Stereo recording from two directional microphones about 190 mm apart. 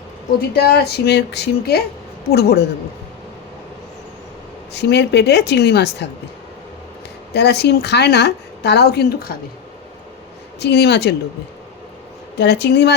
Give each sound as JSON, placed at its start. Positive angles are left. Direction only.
{"t": 0.3, "sound": "a woman's voice", "side_deg": 55}
{"t": 4.7, "sound": "a woman's voice", "side_deg": 65}
{"t": 7.3, "sound": "a woman's voice", "side_deg": 60}
{"t": 10.6, "sound": "a woman's voice", "side_deg": 60}
{"t": 12.4, "sound": "a woman's voice", "side_deg": 65}